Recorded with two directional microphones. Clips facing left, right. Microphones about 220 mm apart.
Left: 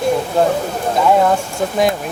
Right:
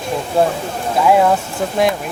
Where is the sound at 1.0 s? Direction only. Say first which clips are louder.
Right 1 dB; 5° right (ahead or behind).